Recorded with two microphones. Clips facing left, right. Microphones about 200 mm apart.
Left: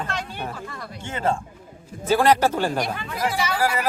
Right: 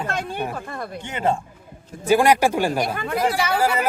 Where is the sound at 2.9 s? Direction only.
60° right (ahead or behind).